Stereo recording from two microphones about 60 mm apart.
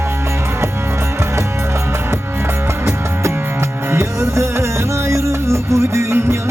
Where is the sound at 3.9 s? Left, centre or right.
Right.